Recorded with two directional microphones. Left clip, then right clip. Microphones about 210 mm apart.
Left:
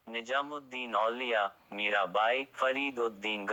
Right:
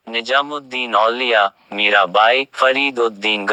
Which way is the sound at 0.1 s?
40° right (ahead or behind).